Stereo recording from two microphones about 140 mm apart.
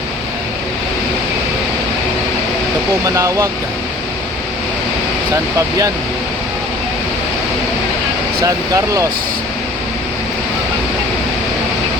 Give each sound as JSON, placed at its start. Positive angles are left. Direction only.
{"t": 3.2, "sound": "speech", "side_deg": -20}
{"t": 5.3, "sound": "speech", "side_deg": -25}
{"t": 8.4, "sound": "speech", "side_deg": -25}